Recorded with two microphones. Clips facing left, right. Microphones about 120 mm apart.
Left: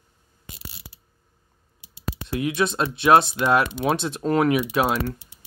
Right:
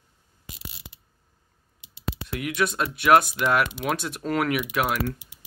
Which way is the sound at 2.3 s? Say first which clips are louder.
Left 3 dB; 25° left (ahead or behind).